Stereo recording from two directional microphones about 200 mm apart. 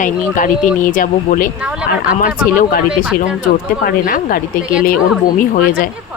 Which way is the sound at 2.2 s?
45° left (ahead or behind).